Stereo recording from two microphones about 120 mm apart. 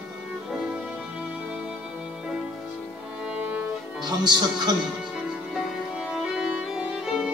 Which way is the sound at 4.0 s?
35° right (ahead or behind).